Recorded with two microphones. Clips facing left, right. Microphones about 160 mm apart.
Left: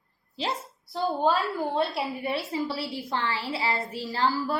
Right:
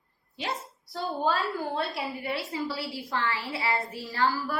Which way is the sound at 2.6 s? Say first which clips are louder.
Left 2 dB; 25° left (ahead or behind).